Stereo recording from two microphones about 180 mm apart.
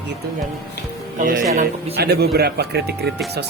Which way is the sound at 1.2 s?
50° right (ahead or behind).